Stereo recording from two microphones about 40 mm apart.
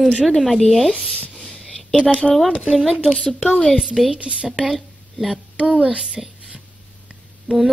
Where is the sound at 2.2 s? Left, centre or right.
Centre.